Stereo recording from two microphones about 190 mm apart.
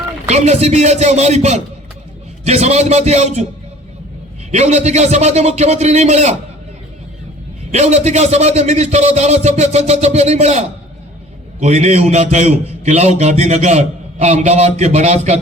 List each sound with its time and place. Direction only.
0.3 s a man's voice: 35° right (ahead or behind)
4.5 s a man's voice: 35° right (ahead or behind)
7.7 s a man's voice: 35° right (ahead or behind)